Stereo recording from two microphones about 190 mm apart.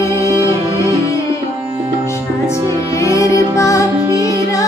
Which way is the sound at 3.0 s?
15° left (ahead or behind).